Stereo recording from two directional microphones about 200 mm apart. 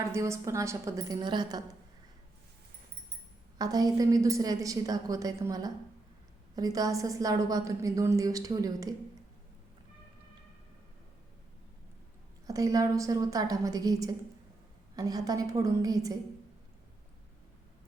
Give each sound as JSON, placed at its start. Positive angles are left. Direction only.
{"t": 0.1, "sound": "a woman's voice", "side_deg": -15}
{"t": 3.6, "sound": "a woman's voice", "side_deg": -20}
{"t": 12.5, "sound": "a woman's voice", "side_deg": -15}